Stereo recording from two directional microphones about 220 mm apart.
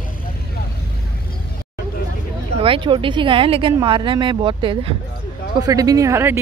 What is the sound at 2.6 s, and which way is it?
Speech, 25° right (ahead or behind).